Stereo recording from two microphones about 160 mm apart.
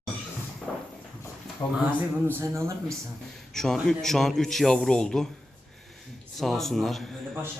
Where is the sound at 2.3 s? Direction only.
15° right (ahead or behind).